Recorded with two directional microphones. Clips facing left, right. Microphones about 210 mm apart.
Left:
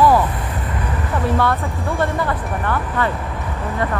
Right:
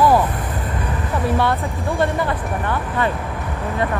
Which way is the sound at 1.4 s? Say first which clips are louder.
Even; 20° right (ahead or behind).